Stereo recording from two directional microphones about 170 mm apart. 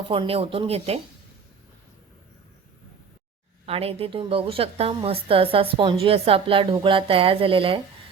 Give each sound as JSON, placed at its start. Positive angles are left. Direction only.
{"t": 0.1, "sound": "a woman's voice", "side_deg": -35}
{"t": 3.7, "sound": "a woman's voice", "side_deg": -35}